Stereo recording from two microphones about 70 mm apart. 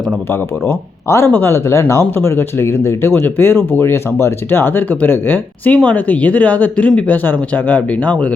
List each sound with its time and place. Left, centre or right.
0.7 s speech: left